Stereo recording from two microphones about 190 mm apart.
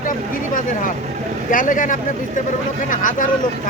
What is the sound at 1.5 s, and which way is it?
Speech, 45° left (ahead or behind).